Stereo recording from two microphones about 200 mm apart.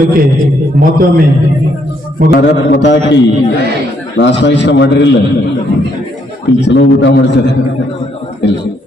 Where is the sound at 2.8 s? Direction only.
60° left (ahead or behind).